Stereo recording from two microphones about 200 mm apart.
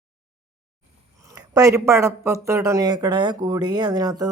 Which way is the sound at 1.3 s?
15° right (ahead or behind).